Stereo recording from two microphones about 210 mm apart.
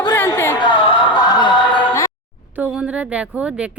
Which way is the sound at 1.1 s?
20° left (ahead or behind).